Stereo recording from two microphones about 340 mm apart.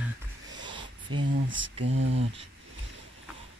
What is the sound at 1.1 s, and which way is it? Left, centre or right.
Mantra, right.